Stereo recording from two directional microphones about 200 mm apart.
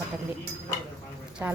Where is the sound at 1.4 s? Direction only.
15° right (ahead or behind).